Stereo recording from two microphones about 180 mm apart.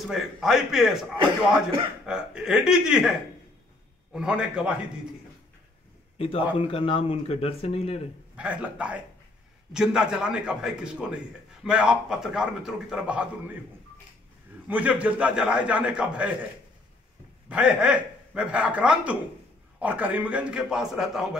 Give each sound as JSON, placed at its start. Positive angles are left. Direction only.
{"t": 0.0, "sound": "a man's voice", "side_deg": 0}
{"t": 2.0, "sound": "a man's voice", "side_deg": -5}
{"t": 4.1, "sound": "a man's voice", "side_deg": -5}
{"t": 6.1, "sound": "a man's voice", "side_deg": 30}
{"t": 8.4, "sound": "a man's voice", "side_deg": -5}
{"t": 14.7, "sound": "a man's voice", "side_deg": -10}
{"t": 17.5, "sound": "a man's voice", "side_deg": -5}